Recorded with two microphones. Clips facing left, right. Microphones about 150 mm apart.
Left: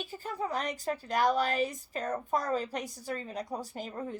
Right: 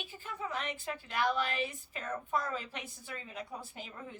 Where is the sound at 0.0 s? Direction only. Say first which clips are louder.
Left 6 dB; 40° left (ahead or behind).